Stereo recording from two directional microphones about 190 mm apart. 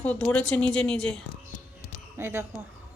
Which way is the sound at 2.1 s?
15° right (ahead or behind).